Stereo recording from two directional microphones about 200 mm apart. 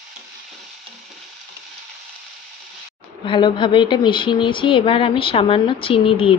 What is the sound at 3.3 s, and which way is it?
A woman's voice, 25° left (ahead or behind).